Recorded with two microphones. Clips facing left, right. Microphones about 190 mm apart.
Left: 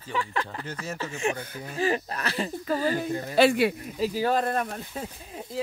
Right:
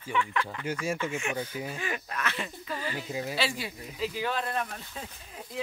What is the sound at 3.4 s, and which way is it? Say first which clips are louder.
Speech: left 18 dB; 60° left (ahead or behind).